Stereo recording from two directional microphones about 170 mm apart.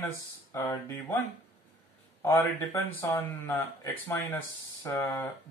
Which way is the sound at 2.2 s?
15° left (ahead or behind).